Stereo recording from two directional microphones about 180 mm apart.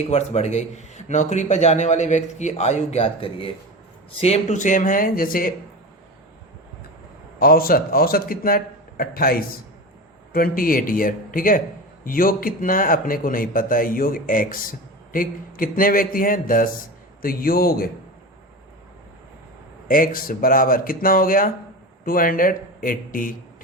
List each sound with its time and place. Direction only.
0.1 s a man's voice: 35° left (ahead or behind); by 5.5 s 50° left (ahead or behind)
7.3 s a man's voice: 55° left (ahead or behind)
19.9 s a man's voice: 50° left (ahead or behind)